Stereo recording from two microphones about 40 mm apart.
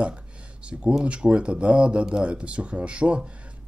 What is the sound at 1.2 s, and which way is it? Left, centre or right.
Speech, right.